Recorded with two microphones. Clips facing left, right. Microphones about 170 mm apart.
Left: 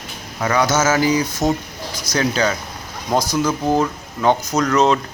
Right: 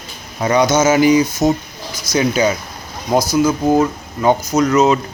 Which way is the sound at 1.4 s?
5° right (ahead or behind).